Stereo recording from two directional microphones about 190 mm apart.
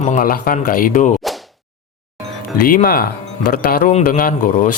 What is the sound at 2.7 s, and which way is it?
Speech, 50° left (ahead or behind).